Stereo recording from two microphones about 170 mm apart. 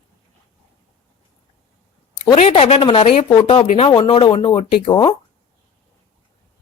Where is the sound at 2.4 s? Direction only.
40° left (ahead or behind).